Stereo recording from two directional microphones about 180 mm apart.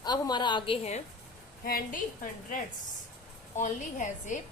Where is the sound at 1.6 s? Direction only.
50° left (ahead or behind).